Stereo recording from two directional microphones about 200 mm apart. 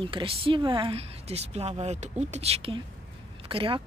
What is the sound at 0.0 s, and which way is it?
A woman's voice, 25° right (ahead or behind).